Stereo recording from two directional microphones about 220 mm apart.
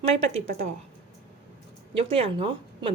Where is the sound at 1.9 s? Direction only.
25° right (ahead or behind).